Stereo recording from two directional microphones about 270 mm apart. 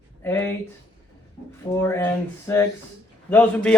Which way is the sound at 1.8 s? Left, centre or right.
Centre.